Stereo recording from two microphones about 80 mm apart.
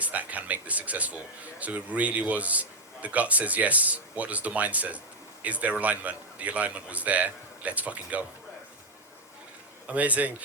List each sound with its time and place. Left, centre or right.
0.0 s a man's voice: centre
9.9 s a man's voice: centre